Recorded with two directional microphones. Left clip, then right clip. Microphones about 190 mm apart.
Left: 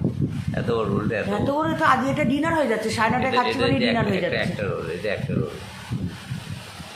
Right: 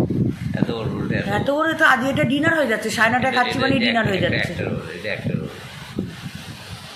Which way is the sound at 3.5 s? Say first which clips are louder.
Right 2 dB; 30° left (ahead or behind).